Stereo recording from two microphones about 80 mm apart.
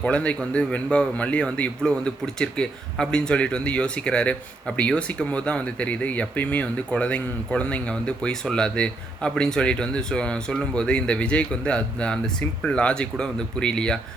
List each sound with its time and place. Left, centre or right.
0.0 s a man's voice: centre